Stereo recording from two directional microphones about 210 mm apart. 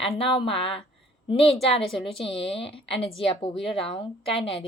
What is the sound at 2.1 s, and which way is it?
Speech, 25° left (ahead or behind).